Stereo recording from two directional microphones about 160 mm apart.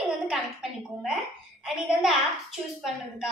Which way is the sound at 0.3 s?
5° right (ahead or behind).